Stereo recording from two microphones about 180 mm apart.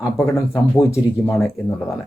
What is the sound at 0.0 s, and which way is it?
Speech, 15° left (ahead or behind).